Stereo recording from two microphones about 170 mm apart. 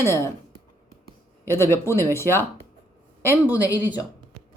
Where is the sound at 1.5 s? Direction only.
15° left (ahead or behind).